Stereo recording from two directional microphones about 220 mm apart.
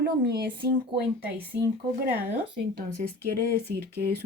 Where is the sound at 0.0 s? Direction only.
50° right (ahead or behind).